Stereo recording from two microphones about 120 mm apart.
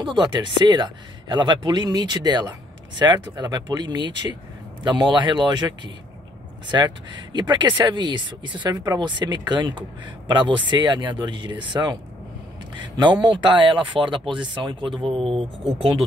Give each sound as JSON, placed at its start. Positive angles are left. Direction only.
{"t": 0.0, "sound": "speech", "side_deg": -40}
{"t": 6.7, "sound": "speech", "side_deg": -40}